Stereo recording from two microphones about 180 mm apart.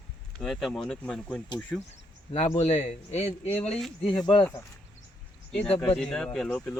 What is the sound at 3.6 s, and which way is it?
Speech, centre (ahead or behind).